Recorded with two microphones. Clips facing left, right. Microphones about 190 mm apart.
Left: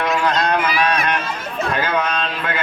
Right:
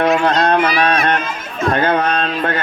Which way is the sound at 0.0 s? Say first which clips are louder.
Right 5 dB; 50° right (ahead or behind).